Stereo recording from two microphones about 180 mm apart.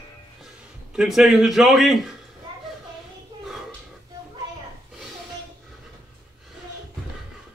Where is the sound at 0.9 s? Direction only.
Centre (ahead or behind).